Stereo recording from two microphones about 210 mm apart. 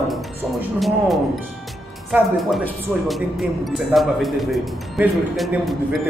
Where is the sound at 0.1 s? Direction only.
Centre (ahead or behind).